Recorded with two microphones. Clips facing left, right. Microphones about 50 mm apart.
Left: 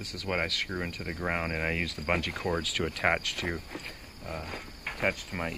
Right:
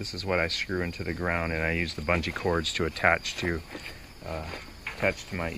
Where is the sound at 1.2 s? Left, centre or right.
Centre.